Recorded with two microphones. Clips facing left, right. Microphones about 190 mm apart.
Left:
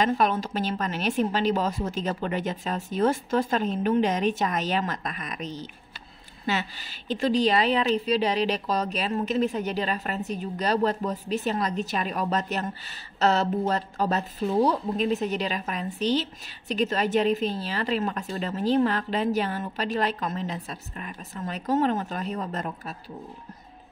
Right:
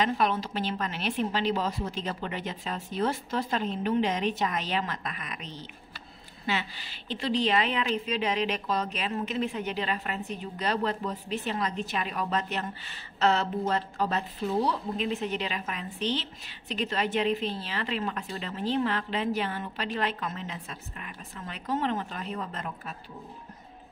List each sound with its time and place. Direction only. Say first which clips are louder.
0.0 s a woman's voice: left 3 dB; 45° left (ahead or behind)